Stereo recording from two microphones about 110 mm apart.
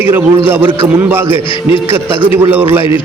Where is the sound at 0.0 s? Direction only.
20° right (ahead or behind).